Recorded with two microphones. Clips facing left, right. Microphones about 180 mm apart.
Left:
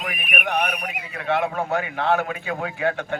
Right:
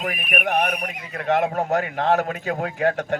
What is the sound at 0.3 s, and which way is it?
Speech, 35° right (ahead or behind).